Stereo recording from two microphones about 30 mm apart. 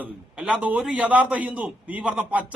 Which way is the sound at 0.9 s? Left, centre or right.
Right.